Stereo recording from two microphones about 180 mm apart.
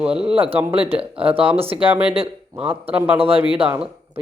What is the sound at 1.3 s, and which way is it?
Speech, 30° right (ahead or behind).